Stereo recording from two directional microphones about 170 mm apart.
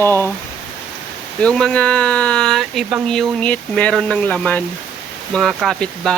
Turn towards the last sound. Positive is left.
turn(degrees=0)  # may be behind; listen again after turning